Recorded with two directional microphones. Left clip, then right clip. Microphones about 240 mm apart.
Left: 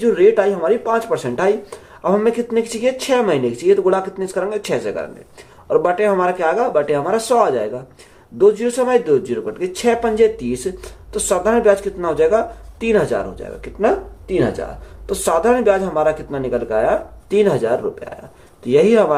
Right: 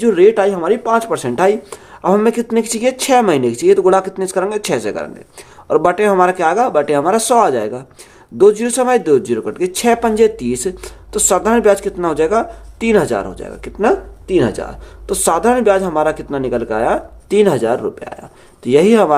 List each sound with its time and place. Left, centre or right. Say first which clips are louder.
0.0 s speech: right 2 dB; right